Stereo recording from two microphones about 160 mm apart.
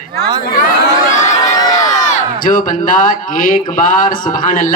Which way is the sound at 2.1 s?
55° left (ahead or behind).